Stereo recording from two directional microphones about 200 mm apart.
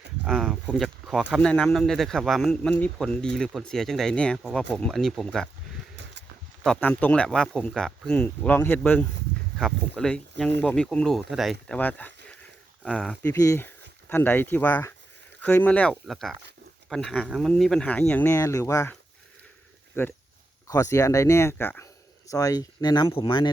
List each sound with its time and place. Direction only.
0.3 s speech: centre (ahead or behind)
6.6 s speech: 5° left (ahead or behind)
13.3 s speech: 15° left (ahead or behind)
20.0 s speech: 10° left (ahead or behind)